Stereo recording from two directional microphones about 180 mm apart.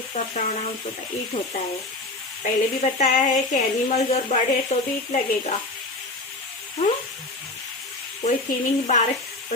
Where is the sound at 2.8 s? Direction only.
40° left (ahead or behind).